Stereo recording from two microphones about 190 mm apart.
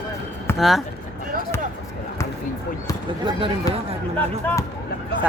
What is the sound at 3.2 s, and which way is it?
Speech, 30° right (ahead or behind).